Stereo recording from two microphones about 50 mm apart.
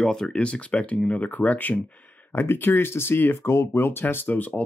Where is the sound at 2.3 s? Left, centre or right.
Left.